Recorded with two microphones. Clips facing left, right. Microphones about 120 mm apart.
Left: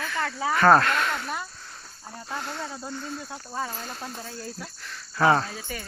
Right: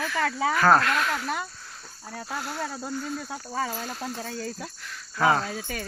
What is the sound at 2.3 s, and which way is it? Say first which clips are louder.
Speech: even; 5° right (ahead or behind).